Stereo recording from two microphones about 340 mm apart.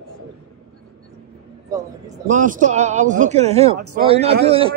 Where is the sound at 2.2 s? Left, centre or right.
Right.